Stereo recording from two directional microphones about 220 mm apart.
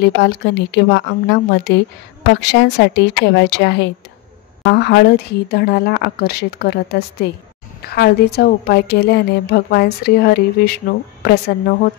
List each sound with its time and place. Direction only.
0.0 s a woman's voice: 50° left (ahead or behind)